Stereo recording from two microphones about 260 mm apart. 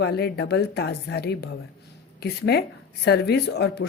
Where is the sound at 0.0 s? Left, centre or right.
Left.